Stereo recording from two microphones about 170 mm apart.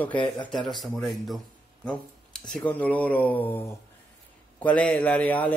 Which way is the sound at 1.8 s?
Centre (ahead or behind).